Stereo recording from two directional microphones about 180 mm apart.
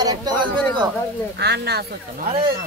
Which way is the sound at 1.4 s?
65° right (ahead or behind).